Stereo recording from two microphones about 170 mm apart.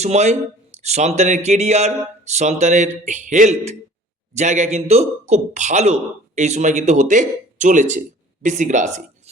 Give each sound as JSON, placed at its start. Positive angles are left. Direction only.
{"t": 0.0, "sound": "a man's voice", "side_deg": -40}